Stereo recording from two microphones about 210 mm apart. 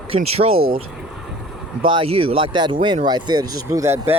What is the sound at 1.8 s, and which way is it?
Speech, 25° right (ahead or behind).